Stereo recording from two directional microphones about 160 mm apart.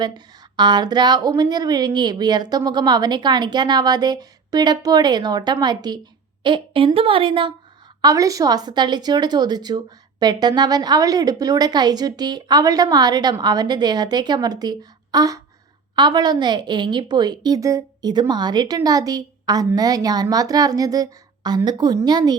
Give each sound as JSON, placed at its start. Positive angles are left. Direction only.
{"t": 0.0, "sound": "a woman's voice", "side_deg": -25}
{"t": 8.0, "sound": "a woman's voice", "side_deg": -20}